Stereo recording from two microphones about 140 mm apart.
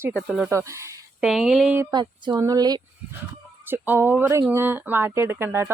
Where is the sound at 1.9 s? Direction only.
30° right (ahead or behind).